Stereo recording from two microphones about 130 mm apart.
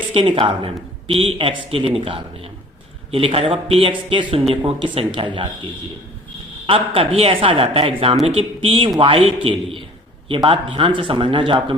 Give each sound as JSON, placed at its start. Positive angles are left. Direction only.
{"t": 0.1, "sound": "speech", "side_deg": -45}
{"t": 6.7, "sound": "speech", "side_deg": -45}